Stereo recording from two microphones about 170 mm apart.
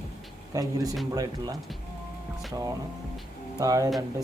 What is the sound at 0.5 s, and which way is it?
Speech, 20° right (ahead or behind).